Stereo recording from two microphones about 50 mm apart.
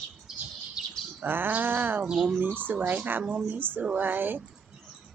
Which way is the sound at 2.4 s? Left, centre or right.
Right.